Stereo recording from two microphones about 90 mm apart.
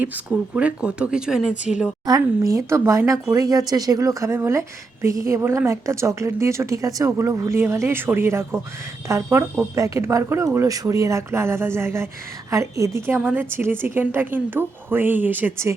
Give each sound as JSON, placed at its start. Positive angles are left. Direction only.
{"t": 0.0, "sound": "speech", "side_deg": -15}
{"t": 2.0, "sound": "a woman's voice", "side_deg": -40}
{"t": 13.1, "sound": "a woman's voice", "side_deg": -20}